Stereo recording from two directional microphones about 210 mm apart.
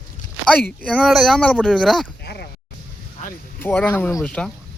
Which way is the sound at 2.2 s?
50° left (ahead or behind).